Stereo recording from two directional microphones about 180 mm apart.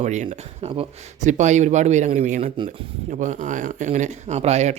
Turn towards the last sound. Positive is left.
turn(degrees=-35)  # may be behind; listen again after turning